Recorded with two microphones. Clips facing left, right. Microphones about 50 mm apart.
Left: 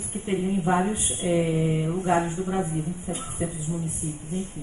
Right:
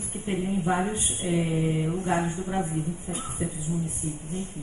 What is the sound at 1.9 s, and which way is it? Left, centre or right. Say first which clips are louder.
Mantra: left 3 dB; left.